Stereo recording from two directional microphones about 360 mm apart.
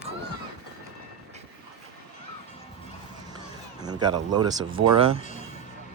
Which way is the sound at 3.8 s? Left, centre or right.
Centre.